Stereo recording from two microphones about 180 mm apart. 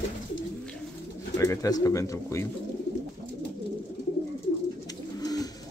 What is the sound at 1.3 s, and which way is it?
Speech, 15° left (ahead or behind).